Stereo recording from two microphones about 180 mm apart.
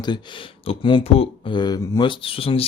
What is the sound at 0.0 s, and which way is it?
Speech, 25° left (ahead or behind).